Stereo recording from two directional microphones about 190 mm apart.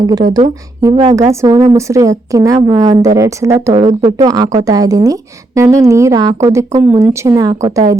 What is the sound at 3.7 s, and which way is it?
Speech, 35° right (ahead or behind).